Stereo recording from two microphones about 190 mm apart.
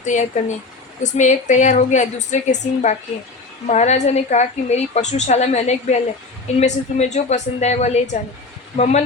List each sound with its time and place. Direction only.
0.0 s a woman's voice: 40° left (ahead or behind)